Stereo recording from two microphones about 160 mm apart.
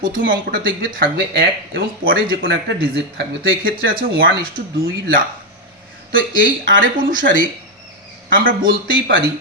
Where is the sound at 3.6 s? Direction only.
65° right (ahead or behind).